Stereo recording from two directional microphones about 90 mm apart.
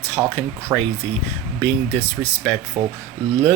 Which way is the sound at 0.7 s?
40° right (ahead or behind).